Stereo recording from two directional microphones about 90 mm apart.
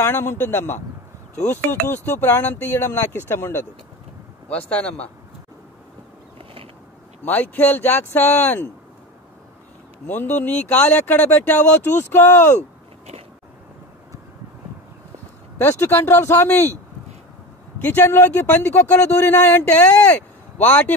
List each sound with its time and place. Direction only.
0.0 s speech: 30° left (ahead or behind)
4.5 s speech: 15° left (ahead or behind)
6.3 s a sound: 90° right
7.2 s speech: 20° left (ahead or behind)
10.0 s speech: 20° left (ahead or behind)
15.6 s speech: 25° left (ahead or behind)
17.8 s speech: 25° left (ahead or behind)